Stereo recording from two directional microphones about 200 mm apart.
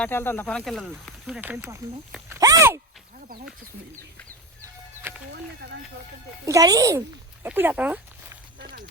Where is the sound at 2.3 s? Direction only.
15° right (ahead or behind).